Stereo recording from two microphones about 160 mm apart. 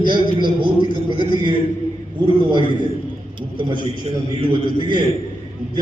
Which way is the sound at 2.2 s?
30° right (ahead or behind).